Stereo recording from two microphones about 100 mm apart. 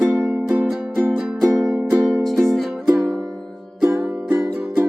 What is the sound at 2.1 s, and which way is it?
Music, centre (ahead or behind).